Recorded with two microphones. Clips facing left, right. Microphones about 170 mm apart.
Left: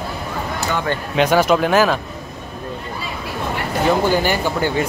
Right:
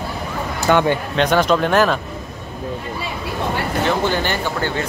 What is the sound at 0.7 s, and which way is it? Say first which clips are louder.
Speech: right 9 dB; 60° right (ahead or behind).